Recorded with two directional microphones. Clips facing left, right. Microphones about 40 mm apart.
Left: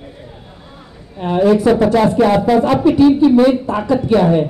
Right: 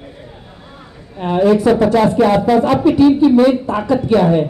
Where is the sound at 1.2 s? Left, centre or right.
Right.